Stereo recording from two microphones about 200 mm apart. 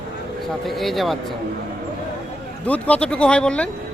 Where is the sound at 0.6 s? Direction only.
Centre (ahead or behind).